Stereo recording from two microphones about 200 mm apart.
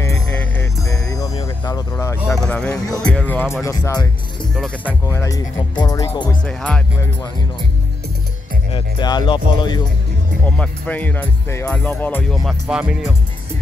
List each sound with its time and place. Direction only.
0.0 s music: 10° left (ahead or behind)
1.3 s music: 30° left (ahead or behind)
1.7 s speech: 15° left (ahead or behind)
2.3 s speech: 5° left (ahead or behind)
6.2 s speech: 5° left (ahead or behind)
8.7 s speech: 20° left (ahead or behind)
10.4 s speech: 10° left (ahead or behind)